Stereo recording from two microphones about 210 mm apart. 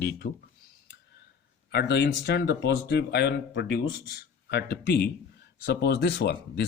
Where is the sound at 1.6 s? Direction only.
50° left (ahead or behind).